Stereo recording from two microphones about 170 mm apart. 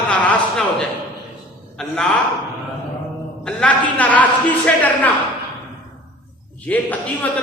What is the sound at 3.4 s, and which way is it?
A man's voice, 5° left (ahead or behind).